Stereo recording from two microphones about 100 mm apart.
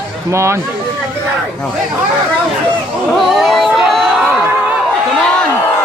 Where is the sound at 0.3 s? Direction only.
25° right (ahead or behind).